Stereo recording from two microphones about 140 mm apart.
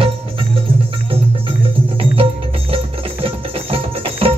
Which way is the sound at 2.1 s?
40° right (ahead or behind).